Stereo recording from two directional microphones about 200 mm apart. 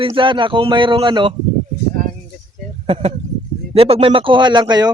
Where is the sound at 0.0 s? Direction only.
25° right (ahead or behind).